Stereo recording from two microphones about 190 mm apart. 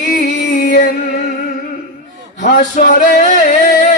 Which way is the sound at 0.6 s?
50° left (ahead or behind).